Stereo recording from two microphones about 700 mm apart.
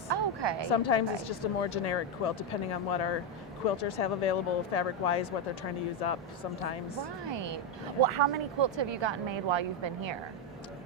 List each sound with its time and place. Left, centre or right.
0.1 s a sound: right
0.7 s speech: left
7.3 s speech: right